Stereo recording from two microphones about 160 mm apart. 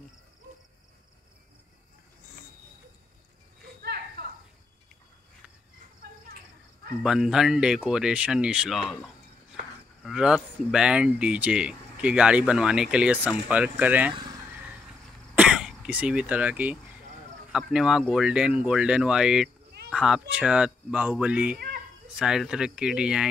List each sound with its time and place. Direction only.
4.2 s a sound: 90° right
6.0 s cricket: 70° right (ahead or behind)
7.0 s speech: 5° right (ahead or behind)
10.0 s speech: 5° right (ahead or behind)
15.3 s throat clearing: 5° right (ahead or behind)
17.5 s speech: 5° right (ahead or behind)